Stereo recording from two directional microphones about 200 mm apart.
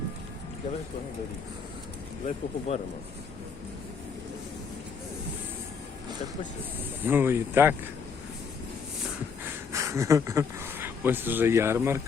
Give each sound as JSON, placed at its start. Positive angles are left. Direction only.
{"t": 2.2, "sound": "speech", "side_deg": 30}
{"t": 7.0, "sound": "speech", "side_deg": -10}
{"t": 9.7, "sound": "speech", "side_deg": -15}